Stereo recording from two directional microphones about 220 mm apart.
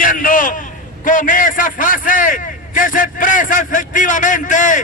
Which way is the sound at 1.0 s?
35° left (ahead or behind).